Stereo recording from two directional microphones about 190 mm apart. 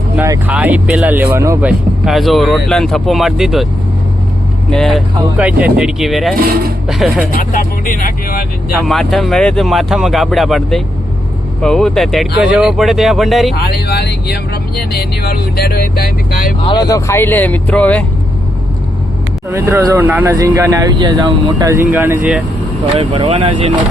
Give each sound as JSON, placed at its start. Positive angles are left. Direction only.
{"t": 0.2, "sound": "speech", "side_deg": -10}
{"t": 2.0, "sound": "speech", "side_deg": 0}
{"t": 4.7, "sound": "speech", "side_deg": 0}
{"t": 7.3, "sound": "speech", "side_deg": 45}
{"t": 8.9, "sound": "speech", "side_deg": 0}
{"t": 13.6, "sound": "speech", "side_deg": 55}
{"t": 16.6, "sound": "speech", "side_deg": 20}
{"t": 19.5, "sound": "speech", "side_deg": -15}
{"t": 23.0, "sound": "speech", "side_deg": -30}